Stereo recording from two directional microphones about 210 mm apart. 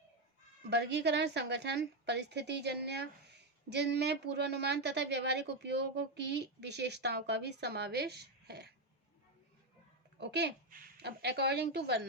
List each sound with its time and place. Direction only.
0.7 s a woman's voice: 55° right (ahead or behind)
10.2 s a woman's voice: 55° right (ahead or behind)